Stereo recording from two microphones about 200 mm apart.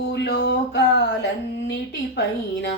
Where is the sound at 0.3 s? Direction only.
55° left (ahead or behind).